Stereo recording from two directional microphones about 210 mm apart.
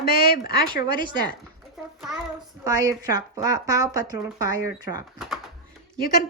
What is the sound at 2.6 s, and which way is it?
Speech, 15° right (ahead or behind).